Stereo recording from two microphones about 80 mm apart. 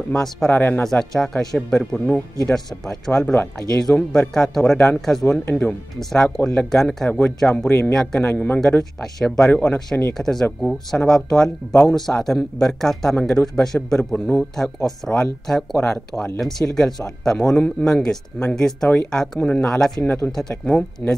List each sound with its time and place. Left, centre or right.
0.1 s speech: centre
0.5 s a man's voice: left
0.8 s speech: centre
5.4 s a man's voice: left
5.7 s speech: centre
7.1 s a man's voice: left
7.3 s speech: centre
7.6 s a man's voice: left
7.9 s speech: centre
8.2 s a man's voice: centre
8.5 s speech: centre